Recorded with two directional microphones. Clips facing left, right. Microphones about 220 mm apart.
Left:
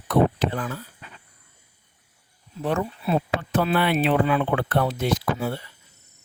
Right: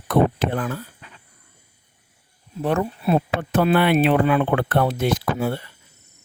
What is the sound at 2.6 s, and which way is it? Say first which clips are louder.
Speech: right 3 dB; 55° right (ahead or behind).